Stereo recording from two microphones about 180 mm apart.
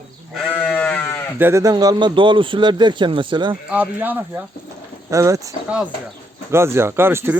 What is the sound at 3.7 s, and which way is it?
Speech, 10° right (ahead or behind).